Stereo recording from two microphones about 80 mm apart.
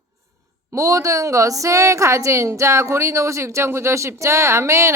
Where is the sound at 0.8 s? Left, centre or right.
Right.